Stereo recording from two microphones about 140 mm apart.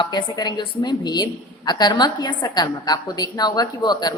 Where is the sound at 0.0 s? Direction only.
30° left (ahead or behind).